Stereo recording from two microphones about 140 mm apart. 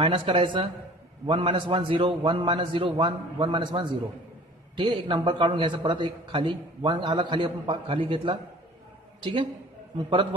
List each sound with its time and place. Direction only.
0.0 s a man's voice: 35° right (ahead or behind)